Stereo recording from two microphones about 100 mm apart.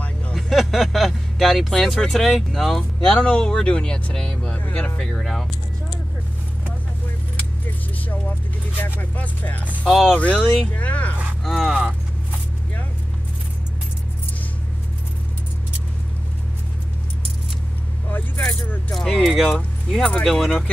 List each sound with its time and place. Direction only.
0.3 s speech: centre (ahead or behind)
8.7 s speech: 20° left (ahead or behind)
9.8 s speech: centre (ahead or behind)
10.1 s speech: 10° left (ahead or behind)
11.4 s speech: centre (ahead or behind)
18.4 s speech: 5° left (ahead or behind)